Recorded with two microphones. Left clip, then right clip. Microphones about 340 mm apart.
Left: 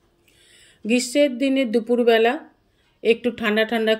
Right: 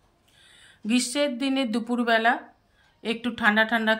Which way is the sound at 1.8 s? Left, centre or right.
Right.